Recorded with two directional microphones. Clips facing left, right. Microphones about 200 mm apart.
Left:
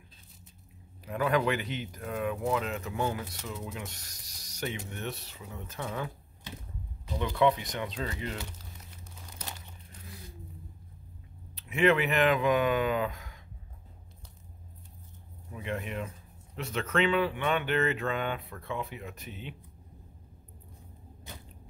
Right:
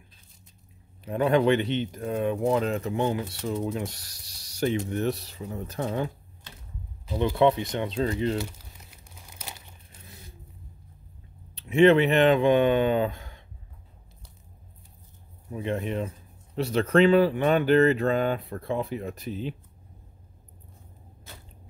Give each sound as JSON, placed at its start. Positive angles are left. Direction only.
{"t": 1.0, "sound": "speech", "side_deg": -30}
{"t": 3.4, "sound": "speech", "side_deg": -40}
{"t": 7.3, "sound": "speech", "side_deg": -25}
{"t": 8.9, "sound": "crumpling", "side_deg": -10}
{"t": 11.5, "sound": "speech", "side_deg": -30}
{"t": 15.5, "sound": "speech", "side_deg": -30}
{"t": 21.3, "sound": "a sound", "side_deg": 15}